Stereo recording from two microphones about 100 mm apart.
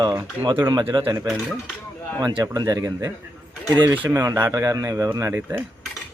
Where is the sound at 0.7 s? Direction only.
50° right (ahead or behind).